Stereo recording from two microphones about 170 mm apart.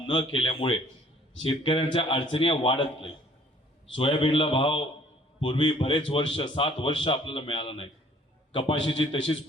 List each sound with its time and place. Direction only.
0.1 s a man's voice: 30° left (ahead or behind)